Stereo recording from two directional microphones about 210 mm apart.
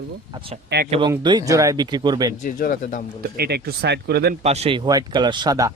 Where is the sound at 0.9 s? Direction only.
25° right (ahead or behind).